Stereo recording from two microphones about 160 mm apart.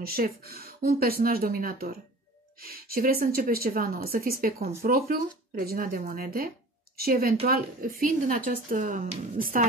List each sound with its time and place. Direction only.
0.0 s speech: 70° right (ahead or behind); by 9.7 s 55° right (ahead or behind)